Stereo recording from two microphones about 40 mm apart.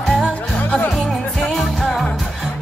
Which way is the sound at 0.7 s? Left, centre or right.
Left.